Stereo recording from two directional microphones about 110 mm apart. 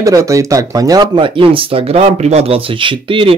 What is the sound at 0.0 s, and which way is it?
Speech, 30° right (ahead or behind).